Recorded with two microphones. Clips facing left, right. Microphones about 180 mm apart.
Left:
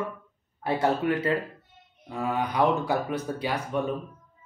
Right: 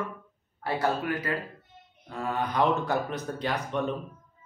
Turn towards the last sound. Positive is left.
turn(degrees=10)  # may be behind; listen again after turning